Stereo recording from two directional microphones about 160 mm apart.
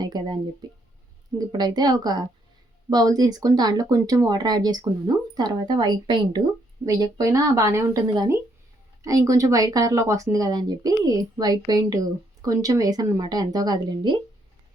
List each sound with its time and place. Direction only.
0.0 s speech: 25° right (ahead or behind)
1.4 s speech: 25° right (ahead or behind)